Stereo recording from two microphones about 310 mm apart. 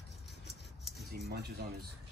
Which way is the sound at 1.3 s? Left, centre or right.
Right.